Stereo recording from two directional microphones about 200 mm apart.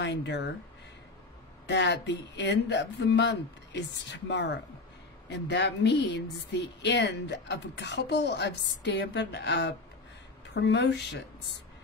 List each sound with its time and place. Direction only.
0.0 s speech: 60° left (ahead or behind)
1.7 s speech: 60° left (ahead or behind)